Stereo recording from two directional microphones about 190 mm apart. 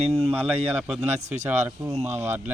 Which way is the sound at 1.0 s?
35° right (ahead or behind).